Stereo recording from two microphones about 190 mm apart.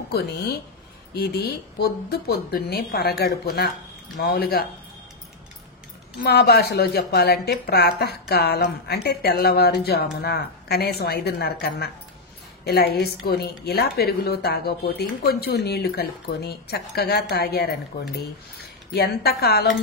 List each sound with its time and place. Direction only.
1.1 s a woman's voice: 55° left (ahead or behind)
6.2 s a woman's voice: 55° left (ahead or behind)
12.6 s a woman's voice: 55° left (ahead or behind)